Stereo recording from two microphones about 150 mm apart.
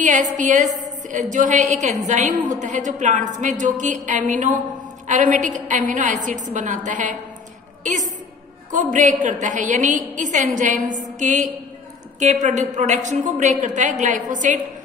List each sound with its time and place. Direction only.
0.0 s a woman's voice: 55° right (ahead or behind)